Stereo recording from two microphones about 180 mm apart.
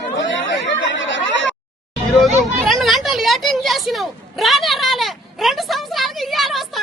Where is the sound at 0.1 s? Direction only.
90° left.